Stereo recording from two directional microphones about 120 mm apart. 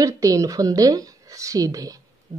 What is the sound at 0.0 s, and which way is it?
A woman's voice, 30° right (ahead or behind).